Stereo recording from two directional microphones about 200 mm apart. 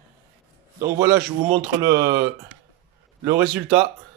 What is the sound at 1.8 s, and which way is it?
Speech, 50° right (ahead or behind).